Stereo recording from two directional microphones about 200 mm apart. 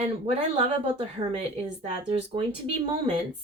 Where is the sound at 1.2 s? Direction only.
30° right (ahead or behind).